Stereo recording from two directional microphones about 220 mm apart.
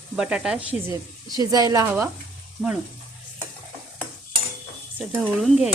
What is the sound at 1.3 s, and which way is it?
Speech, 15° right (ahead or behind).